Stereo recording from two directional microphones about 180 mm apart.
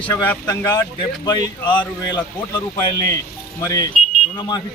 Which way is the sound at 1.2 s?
20° left (ahead or behind).